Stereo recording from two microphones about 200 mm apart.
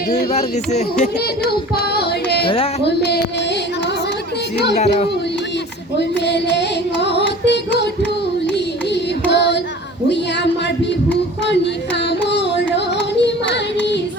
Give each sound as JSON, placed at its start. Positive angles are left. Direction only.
{"t": 0.3, "sound": "speech", "side_deg": 35}
{"t": 1.5, "sound": "carnatic music", "side_deg": 50}
{"t": 6.0, "sound": "carnatic music", "side_deg": 60}
{"t": 9.2, "sound": "child singing", "side_deg": 60}
{"t": 12.3, "sound": "yodeling", "side_deg": 60}